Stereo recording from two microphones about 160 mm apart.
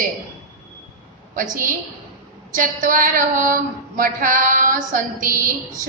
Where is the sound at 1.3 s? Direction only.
55° right (ahead or behind).